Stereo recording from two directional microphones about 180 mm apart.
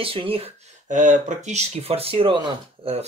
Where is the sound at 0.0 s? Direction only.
30° right (ahead or behind).